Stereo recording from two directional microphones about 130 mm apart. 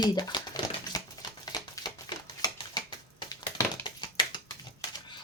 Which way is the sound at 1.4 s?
30° left (ahead or behind).